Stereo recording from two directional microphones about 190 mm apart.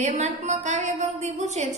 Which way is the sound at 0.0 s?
35° right (ahead or behind).